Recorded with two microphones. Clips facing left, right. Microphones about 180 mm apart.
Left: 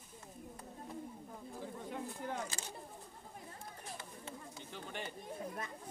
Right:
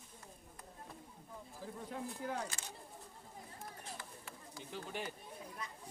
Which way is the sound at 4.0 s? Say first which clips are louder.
Left 4 dB; 25° left (ahead or behind).